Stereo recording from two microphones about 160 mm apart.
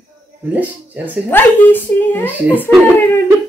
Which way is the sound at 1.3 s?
10° left (ahead or behind).